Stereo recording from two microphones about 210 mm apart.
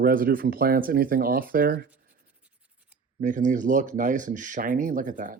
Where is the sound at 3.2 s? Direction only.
40° right (ahead or behind).